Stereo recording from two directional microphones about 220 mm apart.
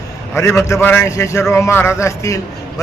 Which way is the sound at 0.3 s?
10° left (ahead or behind).